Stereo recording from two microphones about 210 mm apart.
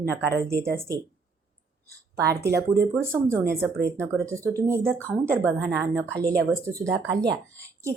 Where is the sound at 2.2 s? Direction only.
15° right (ahead or behind).